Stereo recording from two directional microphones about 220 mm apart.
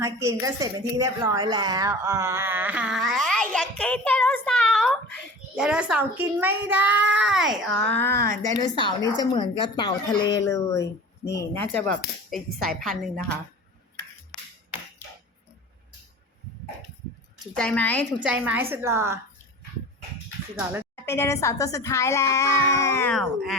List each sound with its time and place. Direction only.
0.0 s a woman's voice: 15° right (ahead or behind); by 8.1 s 10° left (ahead or behind)
8.1 s speech: 40° right (ahead or behind)
8.5 s a child's voice: 20° left (ahead or behind); by 13.3 s centre (ahead or behind)
17.4 s speech: 5° left (ahead or behind)
18.2 s a woman's voice: 5° right (ahead or behind)
20.9 s a child's voice: 10° left (ahead or behind)
23.1 s speech: centre (ahead or behind)